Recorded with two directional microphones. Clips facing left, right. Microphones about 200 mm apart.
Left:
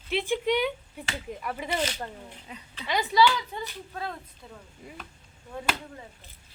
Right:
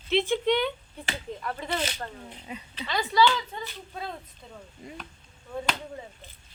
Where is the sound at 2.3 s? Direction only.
20° right (ahead or behind).